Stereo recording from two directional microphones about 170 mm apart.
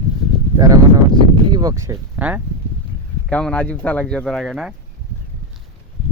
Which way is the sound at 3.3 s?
5° left (ahead or behind).